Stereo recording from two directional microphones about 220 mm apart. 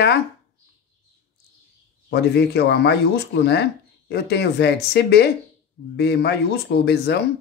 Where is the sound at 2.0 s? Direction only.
50° left (ahead or behind).